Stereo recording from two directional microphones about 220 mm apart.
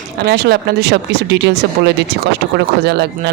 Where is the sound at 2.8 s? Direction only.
50° right (ahead or behind).